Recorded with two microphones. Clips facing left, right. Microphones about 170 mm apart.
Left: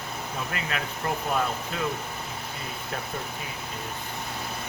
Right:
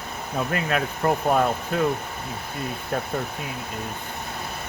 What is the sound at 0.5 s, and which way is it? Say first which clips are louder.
Speech: right 7 dB; 50° right (ahead or behind).